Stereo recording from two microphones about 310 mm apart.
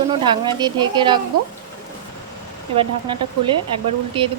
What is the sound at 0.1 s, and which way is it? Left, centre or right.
Speech, centre.